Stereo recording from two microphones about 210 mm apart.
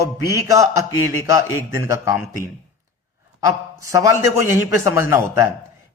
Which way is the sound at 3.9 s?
15° right (ahead or behind).